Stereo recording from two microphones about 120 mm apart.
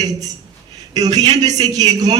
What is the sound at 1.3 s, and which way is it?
Speech, 70° right (ahead or behind).